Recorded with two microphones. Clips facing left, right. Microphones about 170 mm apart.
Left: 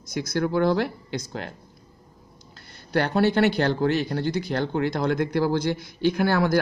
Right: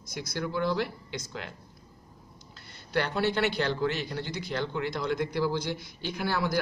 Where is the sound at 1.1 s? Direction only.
45° left (ahead or behind).